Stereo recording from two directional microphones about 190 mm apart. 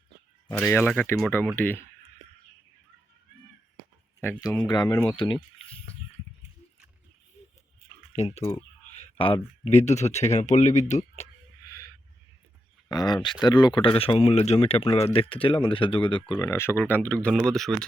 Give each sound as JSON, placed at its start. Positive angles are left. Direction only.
{"t": 0.5, "sound": "speech", "side_deg": 10}
{"t": 4.4, "sound": "speech", "side_deg": 0}
{"t": 4.6, "sound": "speech", "side_deg": 20}
{"t": 8.1, "sound": "speech", "side_deg": 35}
{"t": 12.9, "sound": "speech", "side_deg": 20}
{"t": 16.4, "sound": "speech", "side_deg": 15}